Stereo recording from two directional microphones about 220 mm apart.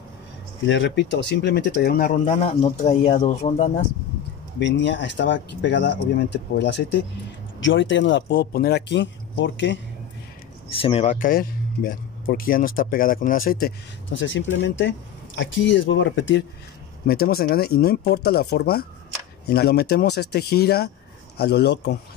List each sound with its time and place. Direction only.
0.7 s speech: 55° left (ahead or behind); by 3.8 s 35° left (ahead or behind)
4.6 s speech: 55° left (ahead or behind)
10.7 s speech: 25° left (ahead or behind); by 13.7 s 40° left (ahead or behind)
14.2 s speech: 55° left (ahead or behind)
17.1 s speech: 45° left (ahead or behind)